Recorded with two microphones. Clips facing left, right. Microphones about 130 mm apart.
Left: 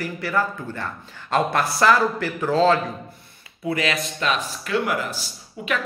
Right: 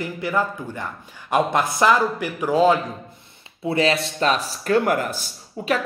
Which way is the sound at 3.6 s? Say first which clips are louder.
Right 4 dB; 30° right (ahead or behind).